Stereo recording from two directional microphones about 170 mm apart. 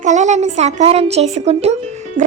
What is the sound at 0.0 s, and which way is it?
Speech, 45° right (ahead or behind).